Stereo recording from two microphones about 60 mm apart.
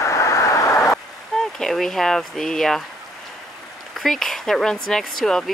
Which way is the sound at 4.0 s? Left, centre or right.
Centre.